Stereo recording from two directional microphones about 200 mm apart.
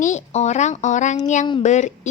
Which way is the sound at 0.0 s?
35° left (ahead or behind).